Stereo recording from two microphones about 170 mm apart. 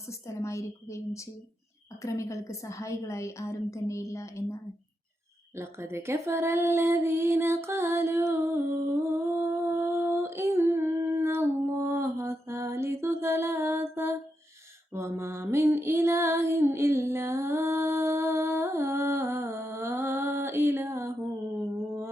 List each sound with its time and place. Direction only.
0.1 s a woman's voice: 15° left (ahead or behind)
5.5 s female singing: 15° right (ahead or behind)
13.9 s music: 15° right (ahead or behind)